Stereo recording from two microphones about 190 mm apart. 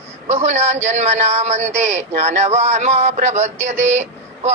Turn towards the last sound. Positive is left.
turn(degrees=-35)  # may be behind; listen again after turning